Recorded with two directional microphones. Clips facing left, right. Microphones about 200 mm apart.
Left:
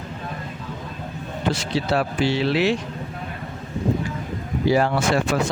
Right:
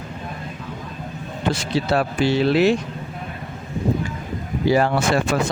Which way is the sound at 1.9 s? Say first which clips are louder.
Right 2 dB; 50° right (ahead or behind).